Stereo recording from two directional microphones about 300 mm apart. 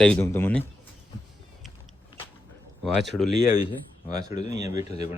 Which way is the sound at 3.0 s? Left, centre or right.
Centre.